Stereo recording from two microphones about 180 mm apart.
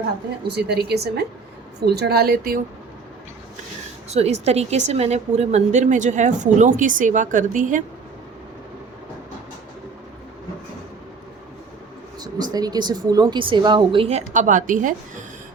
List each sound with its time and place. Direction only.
0.4 s speech: 65° right (ahead or behind)
4.1 s a woman's voice: 35° right (ahead or behind)
12.2 s a woman's voice: 20° right (ahead or behind); by 14.9 s 45° right (ahead or behind)